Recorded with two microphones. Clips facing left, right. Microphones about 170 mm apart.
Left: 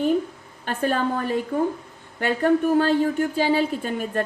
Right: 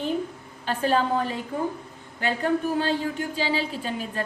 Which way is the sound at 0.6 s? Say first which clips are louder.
Even; 50° left (ahead or behind).